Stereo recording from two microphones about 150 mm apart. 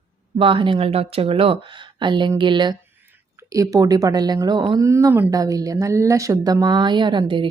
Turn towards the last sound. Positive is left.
turn(degrees=-30)  # may be behind; listen again after turning